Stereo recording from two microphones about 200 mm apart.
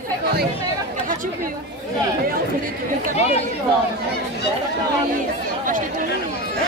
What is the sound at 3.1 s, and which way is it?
Speech, 30° left (ahead or behind).